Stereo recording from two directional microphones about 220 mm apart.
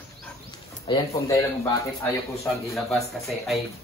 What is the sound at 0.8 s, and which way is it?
Speech, 20° left (ahead or behind).